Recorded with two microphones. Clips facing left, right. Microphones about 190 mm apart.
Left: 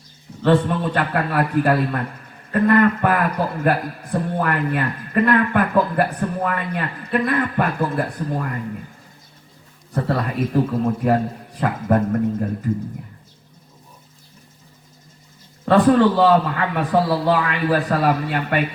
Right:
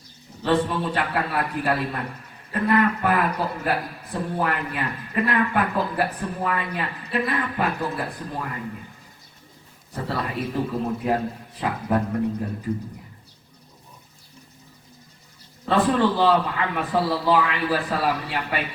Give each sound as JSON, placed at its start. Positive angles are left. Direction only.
{"t": 0.4, "sound": "a man's voice", "side_deg": 50}
{"t": 9.9, "sound": "a man's voice", "side_deg": 50}
{"t": 15.7, "sound": "a man's voice", "side_deg": 45}